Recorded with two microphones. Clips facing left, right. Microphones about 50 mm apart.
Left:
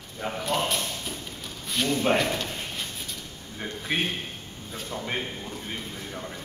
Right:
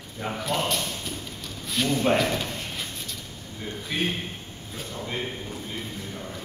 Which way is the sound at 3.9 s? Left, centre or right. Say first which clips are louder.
Left 1 dB; left.